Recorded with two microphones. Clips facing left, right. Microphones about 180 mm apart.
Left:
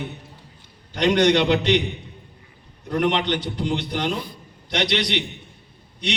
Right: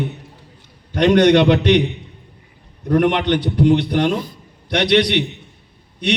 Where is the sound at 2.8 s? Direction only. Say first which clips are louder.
Right 6 dB; 50° right (ahead or behind).